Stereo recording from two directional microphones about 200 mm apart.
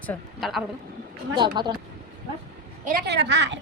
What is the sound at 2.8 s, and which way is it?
Speech, 50° right (ahead or behind).